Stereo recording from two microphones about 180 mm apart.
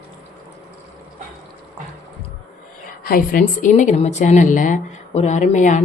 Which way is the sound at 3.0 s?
50° left (ahead or behind).